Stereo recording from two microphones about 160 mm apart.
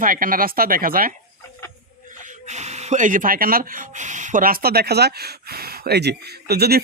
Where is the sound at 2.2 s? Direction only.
45° right (ahead or behind).